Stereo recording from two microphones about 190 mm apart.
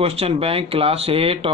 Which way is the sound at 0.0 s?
30° right (ahead or behind).